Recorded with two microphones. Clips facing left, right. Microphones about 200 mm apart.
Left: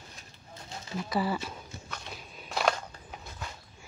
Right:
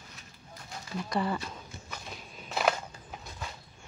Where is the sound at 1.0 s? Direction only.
5° left (ahead or behind).